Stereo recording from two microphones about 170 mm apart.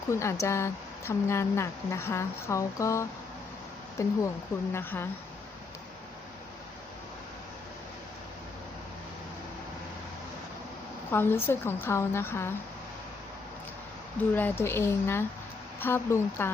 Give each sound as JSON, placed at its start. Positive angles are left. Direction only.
{"t": 0.1, "sound": "speech", "side_deg": 15}
{"t": 11.1, "sound": "speech", "side_deg": 15}
{"t": 14.2, "sound": "speech", "side_deg": 10}